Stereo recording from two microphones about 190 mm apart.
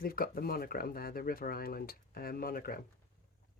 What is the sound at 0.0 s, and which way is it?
Speech, 50° left (ahead or behind).